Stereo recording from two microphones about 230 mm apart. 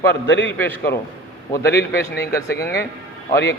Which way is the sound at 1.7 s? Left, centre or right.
Left.